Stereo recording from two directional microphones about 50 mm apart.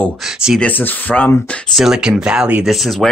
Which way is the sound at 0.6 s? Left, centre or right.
Left.